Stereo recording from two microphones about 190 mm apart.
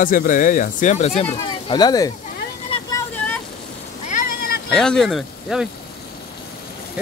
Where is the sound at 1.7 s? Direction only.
20° left (ahead or behind).